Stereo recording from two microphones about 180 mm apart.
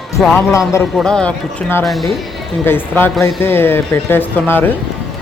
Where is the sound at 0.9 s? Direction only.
5° left (ahead or behind).